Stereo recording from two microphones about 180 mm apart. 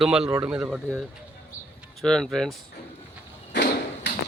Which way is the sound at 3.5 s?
70° left (ahead or behind).